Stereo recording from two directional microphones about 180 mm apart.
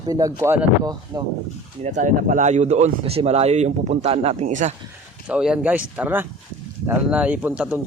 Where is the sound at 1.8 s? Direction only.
45° right (ahead or behind).